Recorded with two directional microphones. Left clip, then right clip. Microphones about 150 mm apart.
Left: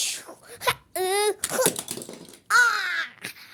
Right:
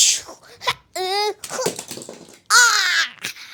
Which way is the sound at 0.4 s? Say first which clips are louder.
Even; 15° left (ahead or behind).